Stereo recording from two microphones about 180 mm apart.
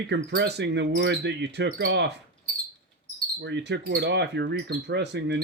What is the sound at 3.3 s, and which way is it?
Speech, 75° right (ahead or behind).